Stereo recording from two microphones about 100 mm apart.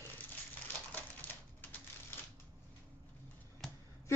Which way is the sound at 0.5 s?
15° left (ahead or behind).